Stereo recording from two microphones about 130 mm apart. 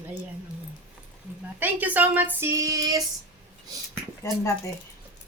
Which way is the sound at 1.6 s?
15° right (ahead or behind).